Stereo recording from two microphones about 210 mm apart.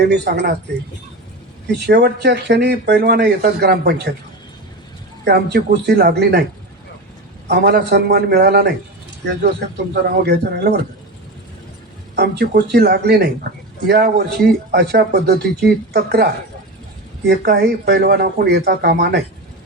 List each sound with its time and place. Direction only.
0.0 s speech: 50° right (ahead or behind)
1.6 s speech: 50° right (ahead or behind)
5.2 s speech: 50° right (ahead or behind)
7.4 s speech: 50° right (ahead or behind)
12.1 s speech: 50° right (ahead or behind)